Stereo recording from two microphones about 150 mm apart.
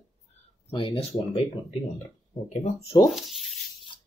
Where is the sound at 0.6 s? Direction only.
35° left (ahead or behind).